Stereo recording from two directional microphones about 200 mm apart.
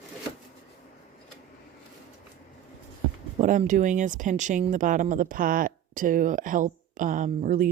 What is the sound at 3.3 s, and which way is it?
Speech, 40° right (ahead or behind).